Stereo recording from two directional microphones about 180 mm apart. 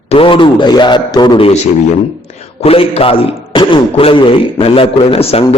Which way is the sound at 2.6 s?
35° left (ahead or behind).